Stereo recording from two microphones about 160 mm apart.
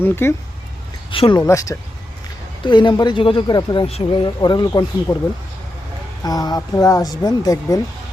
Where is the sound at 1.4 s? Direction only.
20° left (ahead or behind).